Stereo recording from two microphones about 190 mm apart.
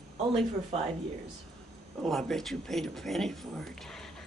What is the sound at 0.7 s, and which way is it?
Speech, 35° right (ahead or behind).